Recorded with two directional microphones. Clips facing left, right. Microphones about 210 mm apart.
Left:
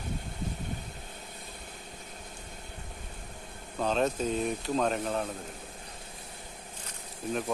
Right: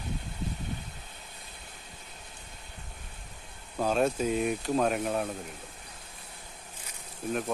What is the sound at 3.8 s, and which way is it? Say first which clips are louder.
Speech: right 2 dB; 10° right (ahead or behind).